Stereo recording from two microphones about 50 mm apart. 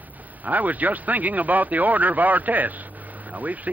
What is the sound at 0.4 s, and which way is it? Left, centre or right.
Speech, right.